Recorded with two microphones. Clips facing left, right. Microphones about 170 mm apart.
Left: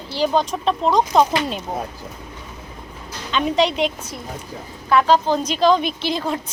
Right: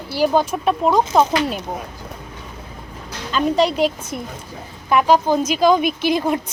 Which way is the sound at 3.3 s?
Centre (ahead or behind).